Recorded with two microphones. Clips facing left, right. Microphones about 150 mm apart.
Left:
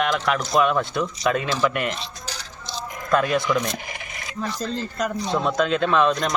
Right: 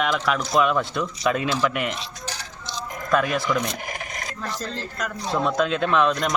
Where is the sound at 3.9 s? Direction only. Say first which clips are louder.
Right 3 dB; 45° right (ahead or behind).